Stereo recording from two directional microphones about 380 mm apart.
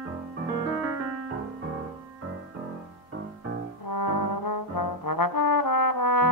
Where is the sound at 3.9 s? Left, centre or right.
Left.